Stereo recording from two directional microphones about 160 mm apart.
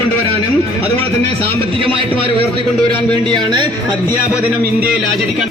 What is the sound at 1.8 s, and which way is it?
Speech, 35° right (ahead or behind).